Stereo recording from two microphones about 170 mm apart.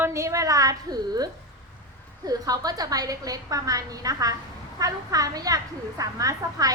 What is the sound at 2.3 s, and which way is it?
A woman's voice, 20° right (ahead or behind).